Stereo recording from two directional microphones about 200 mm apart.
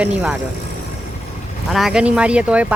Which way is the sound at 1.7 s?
Centre (ahead or behind).